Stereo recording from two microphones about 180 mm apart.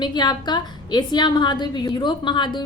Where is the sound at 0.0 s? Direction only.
25° left (ahead or behind).